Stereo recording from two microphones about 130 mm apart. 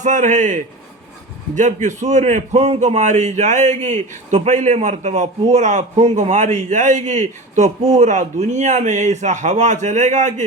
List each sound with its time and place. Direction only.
0.0 s a man's voice: 70° right (ahead or behind)